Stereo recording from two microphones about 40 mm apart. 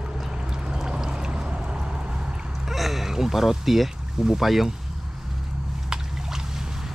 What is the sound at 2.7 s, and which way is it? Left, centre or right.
Speech, centre.